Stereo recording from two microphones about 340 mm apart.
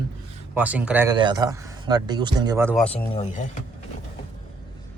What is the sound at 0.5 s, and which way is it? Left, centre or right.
Speech, centre.